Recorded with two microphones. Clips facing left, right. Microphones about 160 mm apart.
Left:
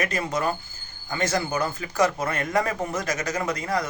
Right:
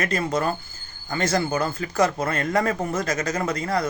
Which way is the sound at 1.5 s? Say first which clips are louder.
Right 2 dB; 15° left (ahead or behind).